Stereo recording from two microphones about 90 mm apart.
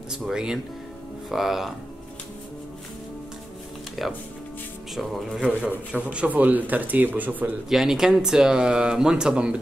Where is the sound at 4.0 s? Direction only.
Centre (ahead or behind).